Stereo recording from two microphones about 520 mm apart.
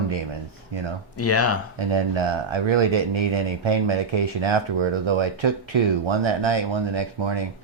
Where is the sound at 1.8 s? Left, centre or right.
Right.